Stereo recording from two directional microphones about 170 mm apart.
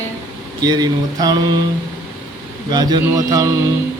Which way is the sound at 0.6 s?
25° right (ahead or behind).